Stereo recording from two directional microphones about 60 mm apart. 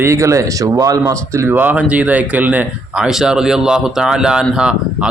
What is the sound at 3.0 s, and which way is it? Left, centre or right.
Speech, centre.